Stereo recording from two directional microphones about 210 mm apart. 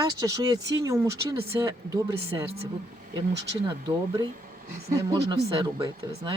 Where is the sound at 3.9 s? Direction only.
20° right (ahead or behind).